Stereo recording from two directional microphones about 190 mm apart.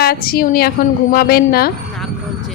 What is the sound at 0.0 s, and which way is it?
Speech, 55° left (ahead or behind).